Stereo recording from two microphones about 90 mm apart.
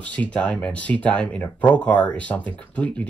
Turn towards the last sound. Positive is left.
turn(degrees=15)  # may be behind; listen again after turning